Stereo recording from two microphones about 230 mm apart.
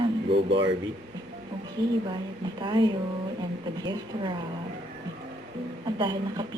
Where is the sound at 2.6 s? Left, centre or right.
Centre.